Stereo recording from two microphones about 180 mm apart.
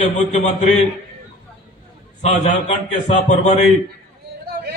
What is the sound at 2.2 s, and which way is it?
Speech, 40° left (ahead or behind).